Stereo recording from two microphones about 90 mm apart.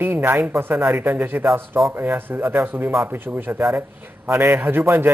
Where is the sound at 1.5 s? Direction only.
Centre (ahead or behind).